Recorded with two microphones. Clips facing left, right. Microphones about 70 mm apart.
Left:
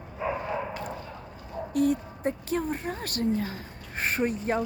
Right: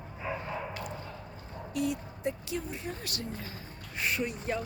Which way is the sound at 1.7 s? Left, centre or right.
Left.